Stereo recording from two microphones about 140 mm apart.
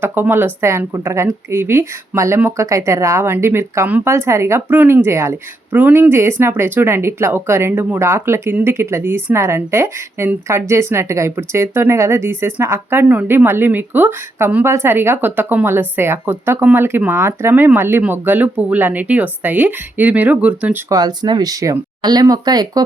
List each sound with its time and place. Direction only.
0.0 s speech: 15° right (ahead or behind)
20.9 s speech: 30° right (ahead or behind)